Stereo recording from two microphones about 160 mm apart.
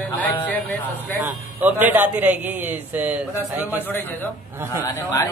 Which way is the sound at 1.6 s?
10° right (ahead or behind).